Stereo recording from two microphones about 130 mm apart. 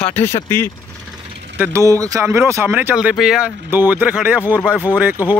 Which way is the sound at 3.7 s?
15° right (ahead or behind).